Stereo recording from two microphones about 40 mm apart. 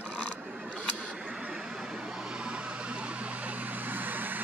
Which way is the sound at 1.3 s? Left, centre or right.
Right.